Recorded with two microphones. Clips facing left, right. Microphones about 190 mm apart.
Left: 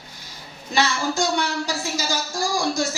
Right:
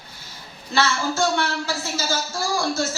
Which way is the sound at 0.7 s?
15° left (ahead or behind).